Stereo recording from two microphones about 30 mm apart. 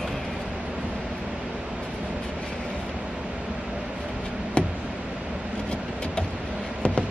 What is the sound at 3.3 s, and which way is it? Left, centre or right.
Vehicle, right.